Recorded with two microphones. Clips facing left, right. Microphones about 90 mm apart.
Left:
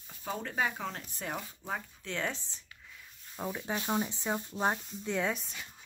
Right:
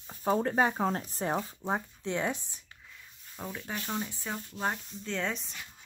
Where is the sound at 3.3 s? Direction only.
10° left (ahead or behind).